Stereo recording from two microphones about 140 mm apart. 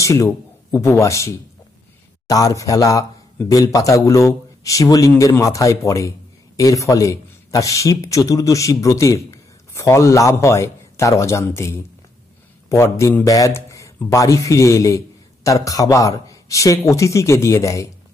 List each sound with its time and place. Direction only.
0.0 s a man's voice: 20° left (ahead or behind)